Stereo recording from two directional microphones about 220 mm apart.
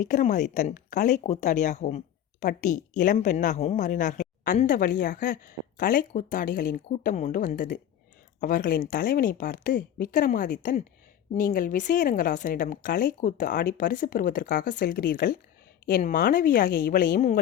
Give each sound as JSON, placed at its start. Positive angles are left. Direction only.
{"t": 0.0, "sound": "speech", "side_deg": 35}